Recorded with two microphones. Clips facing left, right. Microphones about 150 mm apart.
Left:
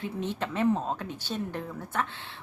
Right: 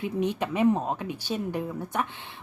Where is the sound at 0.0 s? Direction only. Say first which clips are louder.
Right 5 dB; 15° right (ahead or behind).